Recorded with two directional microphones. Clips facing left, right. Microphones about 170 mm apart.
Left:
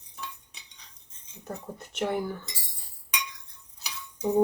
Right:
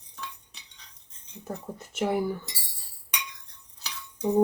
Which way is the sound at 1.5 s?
5° right (ahead or behind).